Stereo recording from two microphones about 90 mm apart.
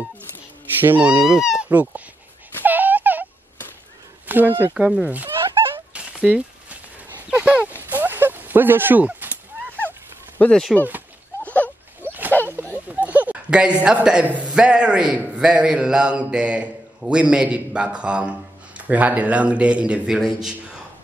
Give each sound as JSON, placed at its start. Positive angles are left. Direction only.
{"t": 0.7, "sound": "speech", "side_deg": -20}
{"t": 1.2, "sound": "speech", "side_deg": -5}
{"t": 1.7, "sound": "a man's voice", "side_deg": -15}
{"t": 2.6, "sound": "wail", "side_deg": -20}
{"t": 4.3, "sound": "speech", "side_deg": -20}
{"t": 4.7, "sound": "a man's voice", "side_deg": -10}
{"t": 5.9, "sound": "a sound", "side_deg": -15}
{"t": 10.4, "sound": "speech", "side_deg": 5}
{"t": 11.4, "sound": "a sound", "side_deg": 15}
{"t": 12.8, "sound": "a sound", "side_deg": -20}
{"t": 13.8, "sound": "a man's voice", "side_deg": -10}